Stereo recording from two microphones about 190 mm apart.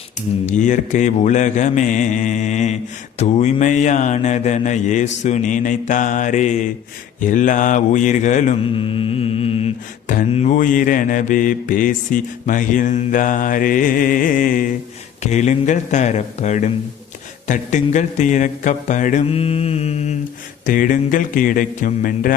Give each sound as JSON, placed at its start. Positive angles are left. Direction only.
{"t": 0.4, "sound": "mantra", "side_deg": 40}
{"t": 8.7, "sound": "mantra", "side_deg": 30}
{"t": 20.7, "sound": "mantra", "side_deg": 45}